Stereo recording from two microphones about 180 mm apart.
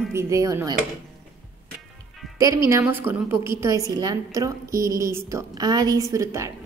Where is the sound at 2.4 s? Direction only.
15° right (ahead or behind).